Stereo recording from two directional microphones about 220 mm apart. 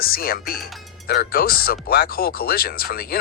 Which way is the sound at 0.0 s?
40° left (ahead or behind).